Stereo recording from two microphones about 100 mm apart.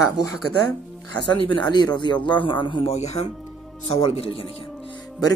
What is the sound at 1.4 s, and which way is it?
Speech, 50° left (ahead or behind).